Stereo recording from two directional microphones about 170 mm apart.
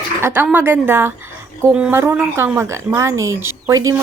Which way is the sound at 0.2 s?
15° right (ahead or behind).